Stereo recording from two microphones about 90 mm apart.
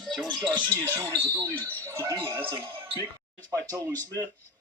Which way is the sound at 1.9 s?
35° right (ahead or behind).